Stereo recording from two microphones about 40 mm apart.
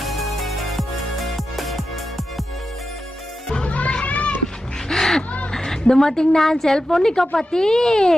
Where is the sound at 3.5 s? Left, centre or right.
Left.